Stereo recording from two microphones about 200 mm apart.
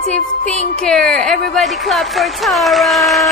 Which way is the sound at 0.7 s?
5° left (ahead or behind).